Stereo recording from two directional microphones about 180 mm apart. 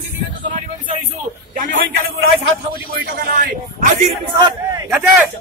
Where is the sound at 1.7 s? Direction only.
90° right.